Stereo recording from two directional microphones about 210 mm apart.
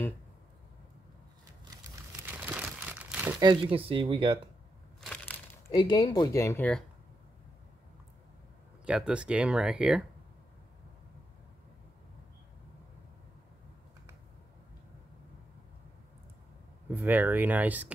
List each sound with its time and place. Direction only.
2.3 s crumpling: 5° right (ahead or behind)
3.4 s speech: 25° right (ahead or behind)
5.0 s crushing: 5° left (ahead or behind)
5.8 s speech: 20° left (ahead or behind)
8.8 s speech: 5° right (ahead or behind)
16.9 s speech: 10° right (ahead or behind)